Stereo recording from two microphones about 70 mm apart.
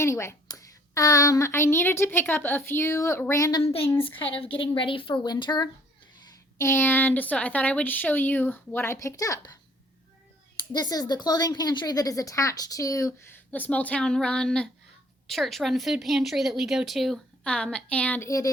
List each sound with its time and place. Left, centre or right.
0.0 s a woman's voice: left
0.4 s a woman's voice: left
2.9 s speech: left
5.2 s speech: left
6.6 s speech: left
9.0 s speech: left
10.8 s speech: left
13.3 s speech: left; by 17.2 s centre
17.4 s speech: centre
18.2 s speech: left